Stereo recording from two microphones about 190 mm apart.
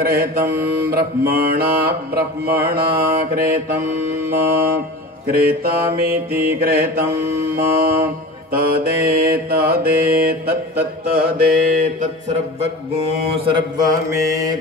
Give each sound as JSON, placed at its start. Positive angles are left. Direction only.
{"t": 0.0, "sound": "mantra", "side_deg": -50}
{"t": 5.3, "sound": "mantra", "side_deg": -50}
{"t": 13.5, "sound": "mantra", "side_deg": -20}